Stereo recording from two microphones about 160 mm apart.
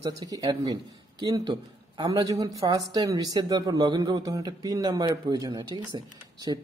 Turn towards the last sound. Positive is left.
turn(degrees=-30)  # may be behind; listen again after turning